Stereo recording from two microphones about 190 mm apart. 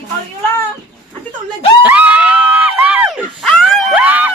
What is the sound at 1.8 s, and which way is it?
Screaming, 5° right (ahead or behind).